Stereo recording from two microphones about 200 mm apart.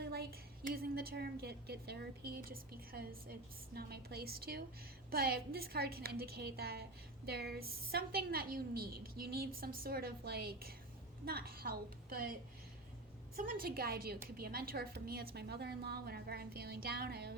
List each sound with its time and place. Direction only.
0.0 s a woman's voice: 50° right (ahead or behind)